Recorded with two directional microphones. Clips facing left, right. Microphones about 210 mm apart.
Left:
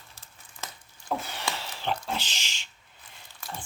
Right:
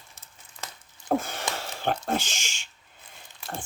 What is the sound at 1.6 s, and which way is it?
Speech, 50° right (ahead or behind).